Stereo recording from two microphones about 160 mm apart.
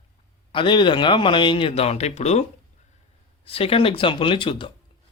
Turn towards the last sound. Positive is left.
turn(degrees=30)  # may be behind; listen again after turning